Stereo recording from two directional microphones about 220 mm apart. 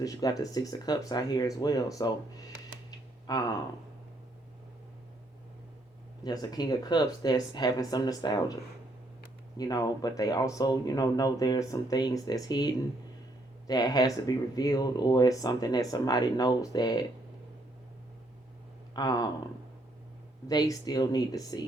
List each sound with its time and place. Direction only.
0.0 s speech: 15° left (ahead or behind)
6.2 s speech: 20° left (ahead or behind)
9.6 s speech: 15° left (ahead or behind)
18.9 s speech: 20° left (ahead or behind)
20.5 s speech: 15° left (ahead or behind)